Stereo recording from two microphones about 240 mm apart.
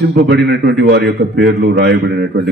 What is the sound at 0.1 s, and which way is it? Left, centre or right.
A man's voice, right.